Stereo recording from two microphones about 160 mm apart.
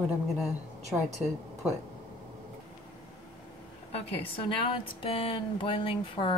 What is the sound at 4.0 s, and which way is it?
A woman's voice, 35° left (ahead or behind).